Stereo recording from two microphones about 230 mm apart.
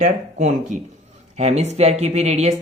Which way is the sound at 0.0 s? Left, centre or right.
Right.